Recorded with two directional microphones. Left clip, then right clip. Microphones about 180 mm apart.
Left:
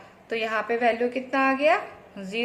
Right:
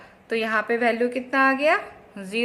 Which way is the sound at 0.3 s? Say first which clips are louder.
Right 3 dB; 35° right (ahead or behind).